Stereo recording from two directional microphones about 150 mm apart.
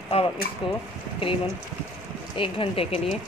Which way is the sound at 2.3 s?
35° left (ahead or behind).